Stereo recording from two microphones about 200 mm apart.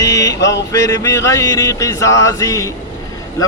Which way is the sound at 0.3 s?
60° left (ahead or behind).